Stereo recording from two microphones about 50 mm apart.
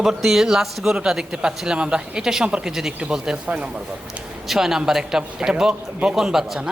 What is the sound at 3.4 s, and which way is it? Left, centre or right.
Speech, right.